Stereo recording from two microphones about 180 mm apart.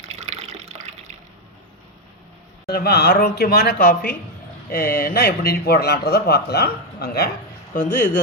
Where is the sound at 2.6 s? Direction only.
60° left (ahead or behind).